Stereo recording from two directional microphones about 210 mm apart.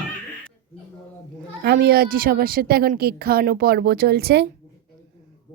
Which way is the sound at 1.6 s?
50° right (ahead or behind).